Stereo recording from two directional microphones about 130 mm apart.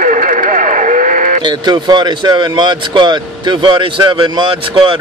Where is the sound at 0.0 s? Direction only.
80° right.